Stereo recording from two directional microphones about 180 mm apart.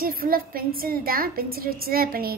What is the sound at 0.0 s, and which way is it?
A woman's voice, 55° right (ahead or behind).